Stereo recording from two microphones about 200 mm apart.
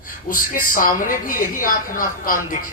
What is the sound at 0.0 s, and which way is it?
Speech, 45° left (ahead or behind).